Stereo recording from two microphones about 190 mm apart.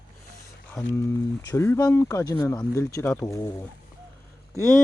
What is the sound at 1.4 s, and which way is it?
Speech, 20° left (ahead or behind).